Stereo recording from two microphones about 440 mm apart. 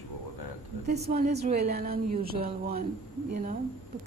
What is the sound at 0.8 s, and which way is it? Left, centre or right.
A woman's voice, centre.